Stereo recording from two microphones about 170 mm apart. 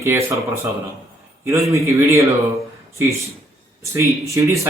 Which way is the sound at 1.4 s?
15° right (ahead or behind).